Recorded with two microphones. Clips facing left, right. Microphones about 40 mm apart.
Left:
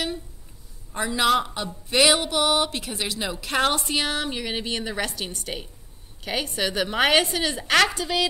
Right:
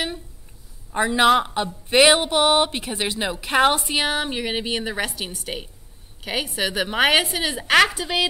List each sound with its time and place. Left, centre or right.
0.9 s a man's voice: right